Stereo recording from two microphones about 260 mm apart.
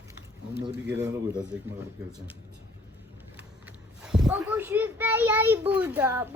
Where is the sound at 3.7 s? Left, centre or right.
Centre.